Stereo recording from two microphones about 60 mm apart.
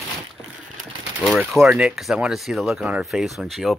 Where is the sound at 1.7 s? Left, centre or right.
Centre.